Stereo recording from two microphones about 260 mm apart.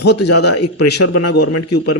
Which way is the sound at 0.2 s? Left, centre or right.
Left.